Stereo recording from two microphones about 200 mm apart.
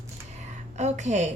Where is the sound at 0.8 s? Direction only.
35° right (ahead or behind).